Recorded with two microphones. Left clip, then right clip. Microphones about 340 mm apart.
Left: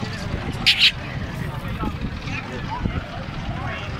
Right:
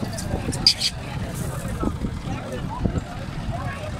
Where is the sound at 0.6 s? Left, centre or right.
Centre.